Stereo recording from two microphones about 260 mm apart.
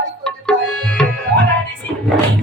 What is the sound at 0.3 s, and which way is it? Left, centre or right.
Tabla, centre.